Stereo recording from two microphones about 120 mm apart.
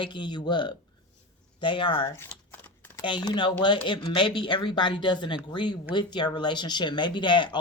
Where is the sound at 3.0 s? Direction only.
40° left (ahead or behind).